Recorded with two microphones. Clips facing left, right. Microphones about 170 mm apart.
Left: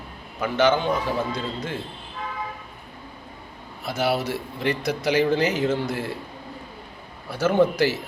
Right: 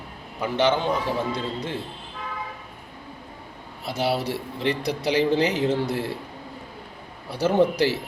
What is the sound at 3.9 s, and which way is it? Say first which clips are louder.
A man's voice: left 1 dB; 30° right (ahead or behind).